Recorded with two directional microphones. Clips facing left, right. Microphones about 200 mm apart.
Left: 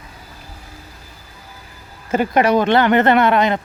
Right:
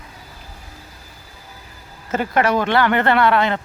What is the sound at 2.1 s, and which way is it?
Speech, 15° left (ahead or behind).